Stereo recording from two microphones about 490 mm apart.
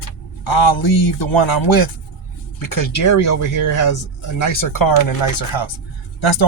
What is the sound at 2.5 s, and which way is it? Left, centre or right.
Speech, left.